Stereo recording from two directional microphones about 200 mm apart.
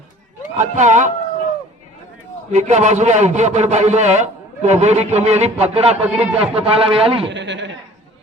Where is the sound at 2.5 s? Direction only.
35° right (ahead or behind).